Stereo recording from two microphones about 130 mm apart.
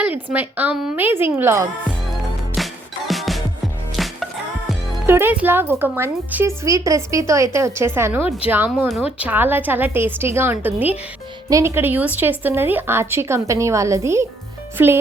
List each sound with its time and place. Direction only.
0.0 s a woman's voice: 15° right (ahead or behind)
2.6 s music: centre (ahead or behind)
5.0 s a woman's voice: 15° right (ahead or behind)